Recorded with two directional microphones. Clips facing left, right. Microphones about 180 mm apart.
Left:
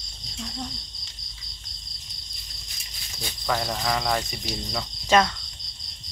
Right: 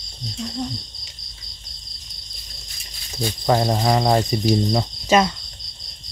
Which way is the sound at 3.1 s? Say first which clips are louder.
Right 9 dB; 35° right (ahead or behind).